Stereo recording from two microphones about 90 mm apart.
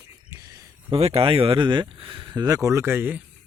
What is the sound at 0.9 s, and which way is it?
Speech, 85° right.